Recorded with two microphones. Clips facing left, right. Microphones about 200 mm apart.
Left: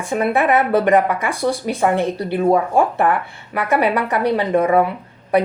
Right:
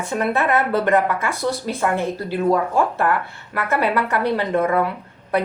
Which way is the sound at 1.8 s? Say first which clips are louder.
Left 4 dB; 15° left (ahead or behind).